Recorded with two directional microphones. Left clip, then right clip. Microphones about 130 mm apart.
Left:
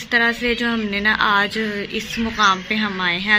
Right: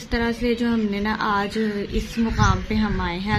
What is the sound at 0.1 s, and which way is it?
A woman's voice, 15° right (ahead or behind).